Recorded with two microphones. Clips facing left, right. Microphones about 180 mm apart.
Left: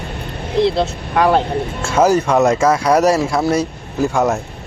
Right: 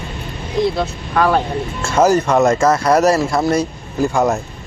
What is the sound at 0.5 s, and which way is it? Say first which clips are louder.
Speech: left 2 dB; 25° left (ahead or behind).